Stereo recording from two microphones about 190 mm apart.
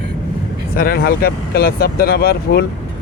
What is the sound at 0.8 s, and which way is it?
Speech, 50° left (ahead or behind).